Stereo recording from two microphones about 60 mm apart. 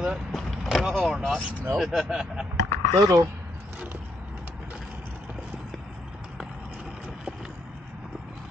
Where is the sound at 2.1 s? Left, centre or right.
Centre.